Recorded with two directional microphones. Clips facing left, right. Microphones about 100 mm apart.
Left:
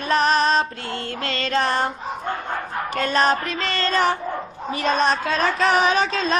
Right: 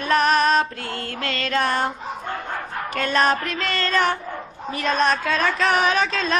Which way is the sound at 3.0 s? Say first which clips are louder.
Even; centre (ahead or behind).